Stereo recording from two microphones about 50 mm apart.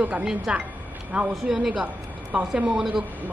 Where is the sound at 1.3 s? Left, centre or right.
Centre.